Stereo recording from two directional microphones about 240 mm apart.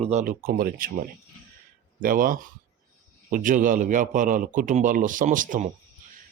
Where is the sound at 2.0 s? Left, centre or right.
Right.